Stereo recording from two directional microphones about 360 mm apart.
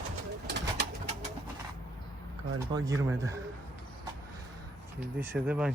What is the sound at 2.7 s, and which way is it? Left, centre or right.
Speech, centre.